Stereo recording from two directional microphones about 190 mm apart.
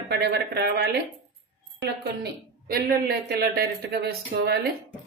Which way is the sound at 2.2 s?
55° right (ahead or behind).